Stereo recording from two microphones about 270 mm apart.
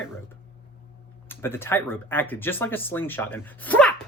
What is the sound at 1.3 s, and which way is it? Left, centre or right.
Speech, centre.